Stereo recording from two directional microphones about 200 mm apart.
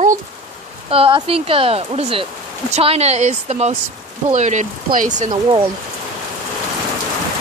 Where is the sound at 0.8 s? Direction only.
30° right (ahead or behind).